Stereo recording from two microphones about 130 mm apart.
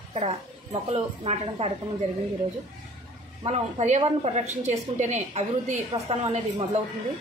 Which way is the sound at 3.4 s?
55° right (ahead or behind).